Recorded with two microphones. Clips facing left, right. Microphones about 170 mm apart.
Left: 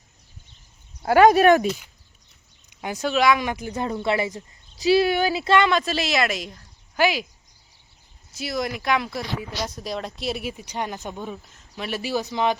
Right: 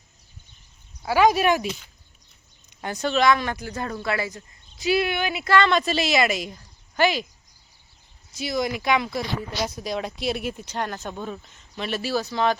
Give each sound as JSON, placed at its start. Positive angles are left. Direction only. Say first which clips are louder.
{"t": 1.0, "sound": "speech", "louder": "left 4 dB", "side_deg": 55}
{"t": 2.6, "sound": "speech", "louder": "even", "side_deg": 10}
{"t": 4.7, "sound": "speech", "louder": "left 4 dB", "side_deg": 35}
{"t": 5.6, "sound": "a woman's voice", "louder": "even", "side_deg": 0}
{"t": 8.3, "sound": "a woman's voice", "louder": "right 2 dB", "side_deg": 0}